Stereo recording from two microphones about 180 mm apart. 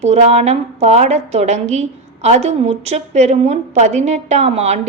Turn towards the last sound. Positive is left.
turn(degrees=-35)  # may be behind; listen again after turning